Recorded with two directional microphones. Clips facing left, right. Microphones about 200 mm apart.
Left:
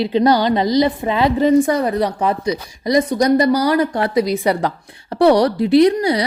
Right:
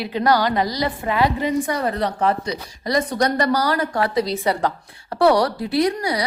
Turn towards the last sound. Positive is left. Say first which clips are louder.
# left 7 dB
turn(degrees=25)  # may be behind; listen again after turning